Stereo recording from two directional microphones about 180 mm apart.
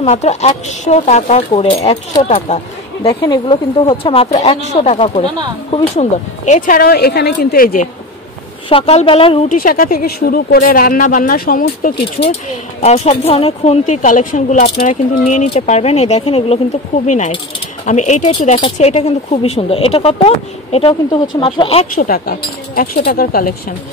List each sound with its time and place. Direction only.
0.0 s speech: 35° left (ahead or behind)
3.1 s speech: 20° left (ahead or behind)
6.4 s speech: 45° left (ahead or behind)
8.6 s speech: 30° left (ahead or behind)
9.5 s speech: 50° left (ahead or behind)
11.9 s speech: 35° left (ahead or behind)
21.9 s speech: 55° left (ahead or behind)